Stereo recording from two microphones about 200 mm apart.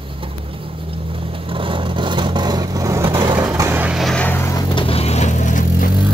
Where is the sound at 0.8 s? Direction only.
25° right (ahead or behind).